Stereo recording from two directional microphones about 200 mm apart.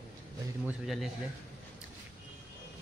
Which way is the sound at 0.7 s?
Centre (ahead or behind).